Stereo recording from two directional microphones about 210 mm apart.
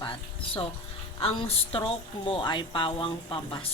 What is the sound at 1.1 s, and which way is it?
A woman's voice, 25° left (ahead or behind).